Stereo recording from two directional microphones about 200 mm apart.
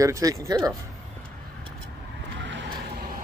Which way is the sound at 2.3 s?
65° right (ahead or behind).